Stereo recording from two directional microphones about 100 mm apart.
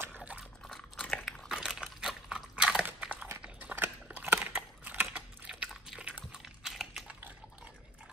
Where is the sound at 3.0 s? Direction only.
15° right (ahead or behind).